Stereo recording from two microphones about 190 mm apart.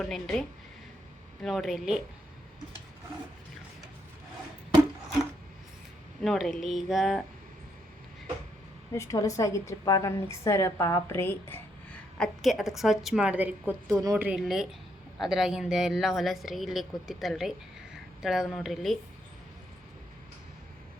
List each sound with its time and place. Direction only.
0.0 s a woman's voice: centre (ahead or behind)
6.2 s a woman's voice: centre (ahead or behind)
8.9 s a woman's voice: 15° left (ahead or behind); by 13.9 s 5° right (ahead or behind)
13.9 s speech: 20° right (ahead or behind)
14.3 s a woman's voice: centre (ahead or behind)